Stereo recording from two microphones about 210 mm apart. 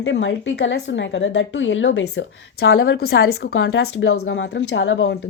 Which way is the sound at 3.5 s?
70° left (ahead or behind).